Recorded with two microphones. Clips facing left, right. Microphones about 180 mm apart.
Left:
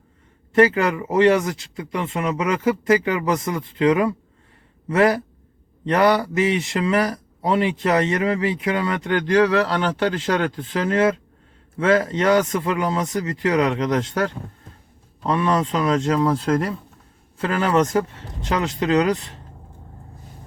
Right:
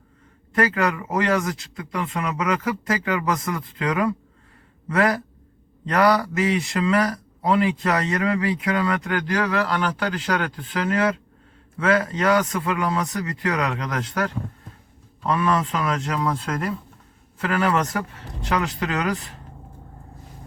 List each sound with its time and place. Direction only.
0.5 s speech: 25° left (ahead or behind)